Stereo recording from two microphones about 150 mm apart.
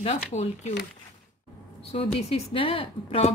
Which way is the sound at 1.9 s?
45° left (ahead or behind).